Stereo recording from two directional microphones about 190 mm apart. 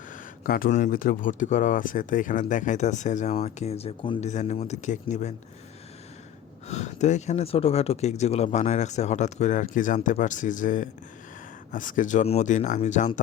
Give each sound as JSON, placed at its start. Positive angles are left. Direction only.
{"t": 0.4, "sound": "speech", "side_deg": 50}
{"t": 6.7, "sound": "speech", "side_deg": 35}